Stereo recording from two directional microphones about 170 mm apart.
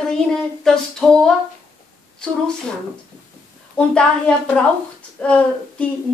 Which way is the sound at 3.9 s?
5° left (ahead or behind).